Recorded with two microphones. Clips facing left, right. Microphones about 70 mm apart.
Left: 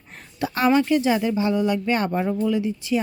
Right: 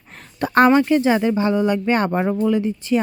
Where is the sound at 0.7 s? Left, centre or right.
Right.